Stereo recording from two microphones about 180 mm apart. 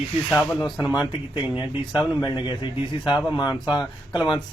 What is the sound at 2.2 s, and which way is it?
A man's voice, 25° left (ahead or behind).